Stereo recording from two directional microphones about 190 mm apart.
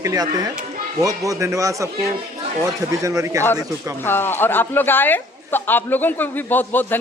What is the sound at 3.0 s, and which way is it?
Speech, 15° right (ahead or behind).